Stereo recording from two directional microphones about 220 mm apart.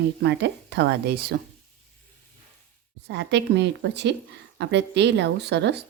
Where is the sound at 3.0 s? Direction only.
50° right (ahead or behind).